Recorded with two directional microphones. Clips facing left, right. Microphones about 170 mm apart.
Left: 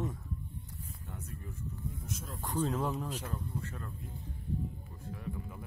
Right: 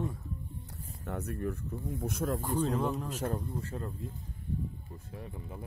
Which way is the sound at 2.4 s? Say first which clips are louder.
Left 2 dB; centre (ahead or behind).